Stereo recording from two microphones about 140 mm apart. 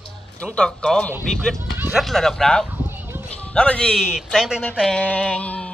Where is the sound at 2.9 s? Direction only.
15° right (ahead or behind).